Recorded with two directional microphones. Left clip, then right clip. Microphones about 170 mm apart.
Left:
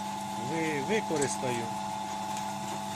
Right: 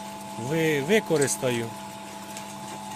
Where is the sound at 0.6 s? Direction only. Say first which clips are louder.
Right 8 dB; 90° right.